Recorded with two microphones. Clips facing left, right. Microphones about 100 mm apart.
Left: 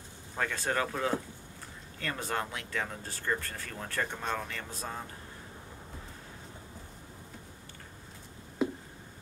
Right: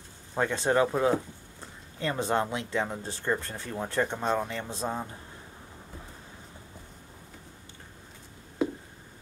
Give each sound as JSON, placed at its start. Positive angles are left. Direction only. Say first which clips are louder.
{"t": 0.4, "sound": "speech", "louder": "right 7 dB", "side_deg": -25}